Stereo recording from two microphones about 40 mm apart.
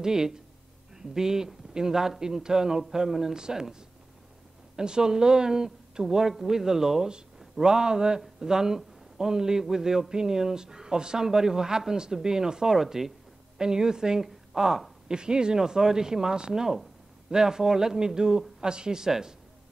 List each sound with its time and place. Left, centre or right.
0.0 s a man's voice: centre
4.7 s a man's voice: centre